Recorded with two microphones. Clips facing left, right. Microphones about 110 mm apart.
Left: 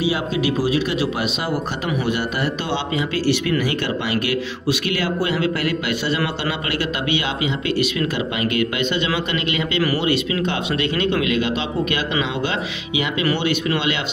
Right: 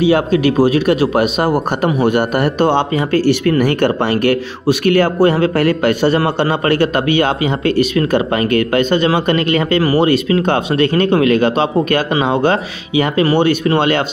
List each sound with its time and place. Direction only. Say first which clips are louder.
0.0 s speech: right 9 dB; 55° right (ahead or behind)